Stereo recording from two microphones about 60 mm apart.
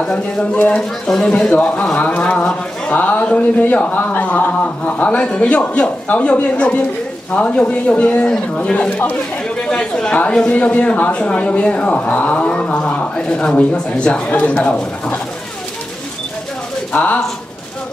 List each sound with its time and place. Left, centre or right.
0.0 s speech: centre
16.9 s speech: left